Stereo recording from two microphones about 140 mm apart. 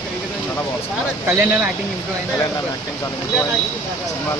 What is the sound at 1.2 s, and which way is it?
Speech, 20° right (ahead or behind).